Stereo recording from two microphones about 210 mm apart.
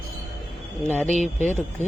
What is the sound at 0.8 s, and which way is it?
Speech, 5° left (ahead or behind).